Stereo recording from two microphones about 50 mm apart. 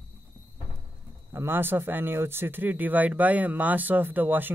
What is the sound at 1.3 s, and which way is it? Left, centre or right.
Speech, right.